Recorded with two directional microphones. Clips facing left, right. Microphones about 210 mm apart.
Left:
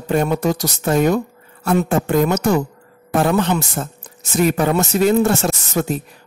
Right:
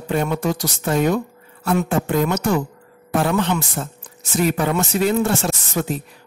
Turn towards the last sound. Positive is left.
turn(degrees=45)  # may be behind; listen again after turning